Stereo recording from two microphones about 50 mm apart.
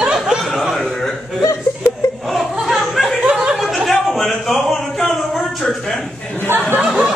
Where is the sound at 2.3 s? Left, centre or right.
Centre.